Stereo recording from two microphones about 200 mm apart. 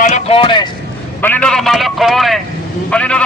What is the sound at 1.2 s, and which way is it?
A man's voice, 5° left (ahead or behind).